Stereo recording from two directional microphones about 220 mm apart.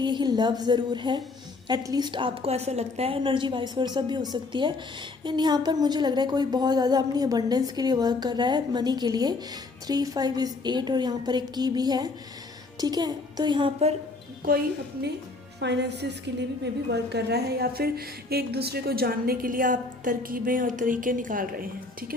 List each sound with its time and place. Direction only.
0.0 s speech: 20° right (ahead or behind)
15.6 s a woman's voice: 50° right (ahead or behind)